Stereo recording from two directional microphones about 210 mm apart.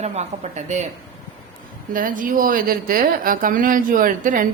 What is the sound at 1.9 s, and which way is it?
A woman's voice, 40° right (ahead or behind).